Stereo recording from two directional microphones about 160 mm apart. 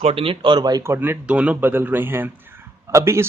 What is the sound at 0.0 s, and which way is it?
Speech, 35° right (ahead or behind).